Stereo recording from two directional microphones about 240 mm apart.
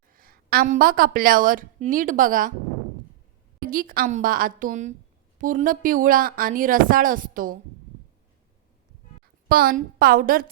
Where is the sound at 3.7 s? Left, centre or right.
Right.